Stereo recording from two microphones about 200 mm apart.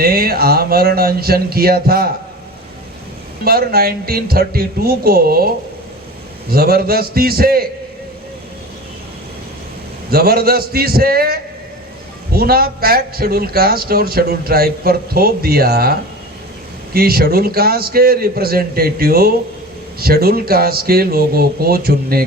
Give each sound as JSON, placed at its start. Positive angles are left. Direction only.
{"t": 0.0, "sound": "a man's voice", "side_deg": -50}
{"t": 3.4, "sound": "a man's voice", "side_deg": -50}
{"t": 6.5, "sound": "a man's voice", "side_deg": -50}
{"t": 10.1, "sound": "a man's voice", "side_deg": -50}